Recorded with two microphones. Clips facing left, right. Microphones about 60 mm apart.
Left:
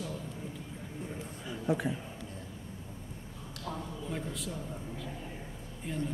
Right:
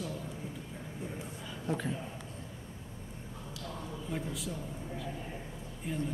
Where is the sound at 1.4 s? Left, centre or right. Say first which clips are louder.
Left 4 dB; centre.